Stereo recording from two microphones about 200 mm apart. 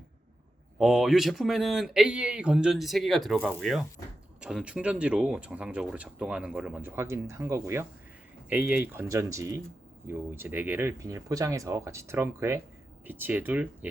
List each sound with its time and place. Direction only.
0.8 s speech: centre (ahead or behind)